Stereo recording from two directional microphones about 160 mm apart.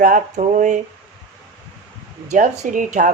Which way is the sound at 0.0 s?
55° right (ahead or behind).